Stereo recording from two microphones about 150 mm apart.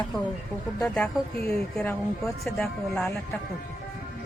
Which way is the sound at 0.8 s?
5° left (ahead or behind).